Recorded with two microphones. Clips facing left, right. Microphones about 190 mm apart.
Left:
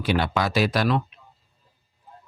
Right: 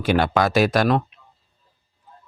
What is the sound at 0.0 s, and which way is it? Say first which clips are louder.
Speech: right 4 dB; 50° right (ahead or behind).